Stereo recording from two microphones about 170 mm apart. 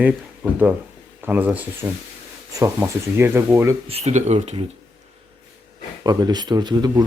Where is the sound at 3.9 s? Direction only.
40° right (ahead or behind).